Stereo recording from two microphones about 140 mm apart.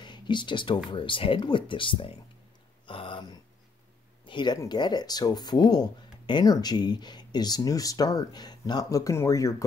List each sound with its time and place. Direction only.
0.0 s speech: 35° left (ahead or behind)
2.9 s a sound: 35° left (ahead or behind)
4.3 s speech: 35° left (ahead or behind)